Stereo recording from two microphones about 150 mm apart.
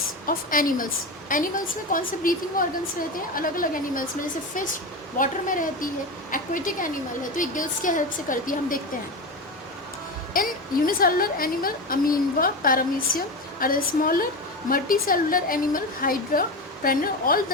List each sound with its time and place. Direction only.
0.3 s a woman's voice: 65° left (ahead or behind)
1.9 s a woman's voice: 65° left (ahead or behind)
5.1 s a woman's voice: 60° left (ahead or behind)
10.3 s a woman's voice: 70° left (ahead or behind)